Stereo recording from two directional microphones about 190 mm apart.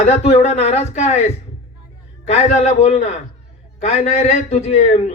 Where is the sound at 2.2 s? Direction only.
35° left (ahead or behind).